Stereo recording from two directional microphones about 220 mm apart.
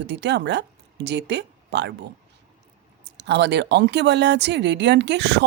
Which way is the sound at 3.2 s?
50° right (ahead or behind).